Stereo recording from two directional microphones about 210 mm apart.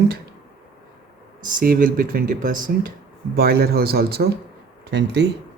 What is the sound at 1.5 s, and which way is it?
Speech, 45° right (ahead or behind).